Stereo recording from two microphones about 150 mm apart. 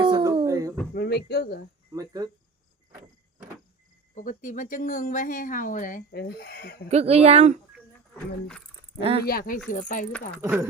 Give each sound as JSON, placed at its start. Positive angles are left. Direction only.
{"t": 0.0, "sound": "a sound", "side_deg": -30}
{"t": 0.4, "sound": "a sound", "side_deg": -20}
{"t": 0.9, "sound": "speech", "side_deg": 90}
{"t": 2.0, "sound": "speech", "side_deg": -25}
{"t": 4.1, "sound": "speech", "side_deg": 60}
{"t": 6.9, "sound": "speech", "side_deg": -45}
{"t": 8.1, "sound": "speech", "side_deg": 5}
{"t": 9.0, "sound": "speech", "side_deg": -40}
{"t": 9.2, "sound": "speech", "side_deg": 80}
{"t": 9.6, "sound": "speech", "side_deg": 60}
{"t": 10.4, "sound": "speech", "side_deg": -20}